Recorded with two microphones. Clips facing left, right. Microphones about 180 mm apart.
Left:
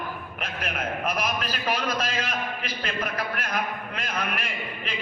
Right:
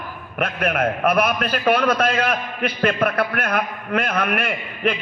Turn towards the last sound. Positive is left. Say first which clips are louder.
# right 11 dB
turn(degrees=-60)  # may be behind; listen again after turning